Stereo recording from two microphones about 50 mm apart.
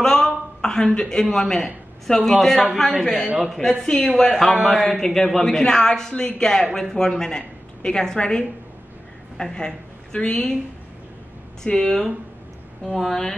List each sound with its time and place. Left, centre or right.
0.0 s a sound: centre
0.9 s a man's voice: centre
11.6 s a man's voice: centre